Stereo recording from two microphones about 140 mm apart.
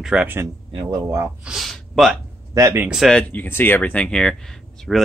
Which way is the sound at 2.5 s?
20° right (ahead or behind).